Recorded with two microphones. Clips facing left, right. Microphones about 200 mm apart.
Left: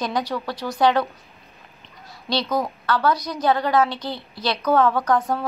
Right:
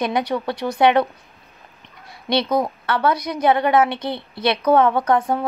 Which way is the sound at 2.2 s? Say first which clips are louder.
Right 4 dB; 25° right (ahead or behind).